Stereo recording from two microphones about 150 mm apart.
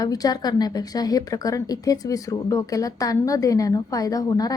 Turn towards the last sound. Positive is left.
turn(degrees=25)  # may be behind; listen again after turning